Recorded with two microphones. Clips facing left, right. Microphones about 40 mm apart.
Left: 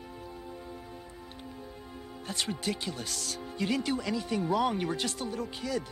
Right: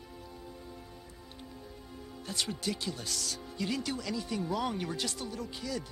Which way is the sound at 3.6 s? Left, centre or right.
Centre.